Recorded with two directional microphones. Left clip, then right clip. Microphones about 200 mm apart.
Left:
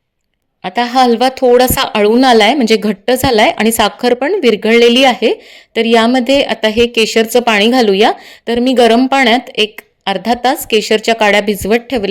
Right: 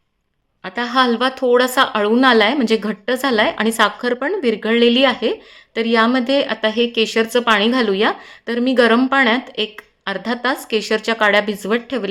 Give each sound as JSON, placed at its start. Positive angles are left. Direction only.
{"t": 0.6, "sound": "a woman's voice", "side_deg": 35}